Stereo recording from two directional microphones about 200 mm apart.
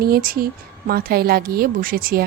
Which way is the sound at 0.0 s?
45° right (ahead or behind).